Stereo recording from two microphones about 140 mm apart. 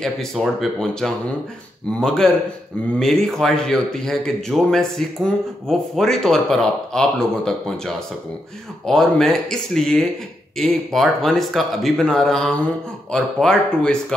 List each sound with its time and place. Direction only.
0.0 s speech: centre (ahead or behind)